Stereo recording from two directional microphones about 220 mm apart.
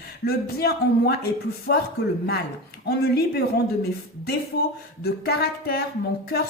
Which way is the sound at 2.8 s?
45° left (ahead or behind).